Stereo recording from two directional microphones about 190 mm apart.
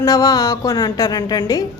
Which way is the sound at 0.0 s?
20° left (ahead or behind).